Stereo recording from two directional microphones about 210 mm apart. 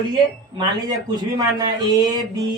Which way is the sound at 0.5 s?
20° right (ahead or behind).